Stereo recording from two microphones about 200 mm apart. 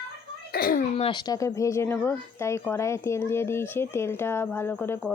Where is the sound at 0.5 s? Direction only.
50° left (ahead or behind).